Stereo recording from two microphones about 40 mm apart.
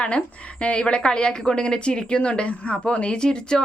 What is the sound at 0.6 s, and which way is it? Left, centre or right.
A woman's voice, left.